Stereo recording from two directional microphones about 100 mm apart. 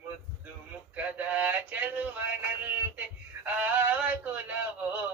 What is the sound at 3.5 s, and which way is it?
Male singing, 15° right (ahead or behind).